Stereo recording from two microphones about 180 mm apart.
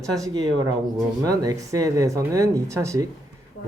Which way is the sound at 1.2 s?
20° right (ahead or behind).